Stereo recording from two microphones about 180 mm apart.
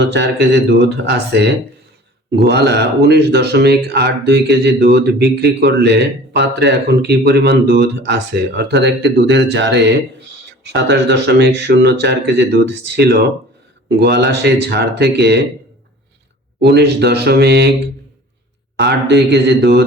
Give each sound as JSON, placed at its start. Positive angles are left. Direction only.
{"t": 0.1, "sound": "speech", "side_deg": -70}
{"t": 16.6, "sound": "speech", "side_deg": -65}
{"t": 18.8, "sound": "speech", "side_deg": -70}